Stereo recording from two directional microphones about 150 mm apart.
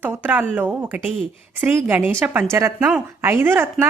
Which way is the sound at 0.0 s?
10° right (ahead or behind).